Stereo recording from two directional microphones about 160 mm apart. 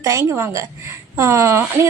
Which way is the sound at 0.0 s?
20° right (ahead or behind).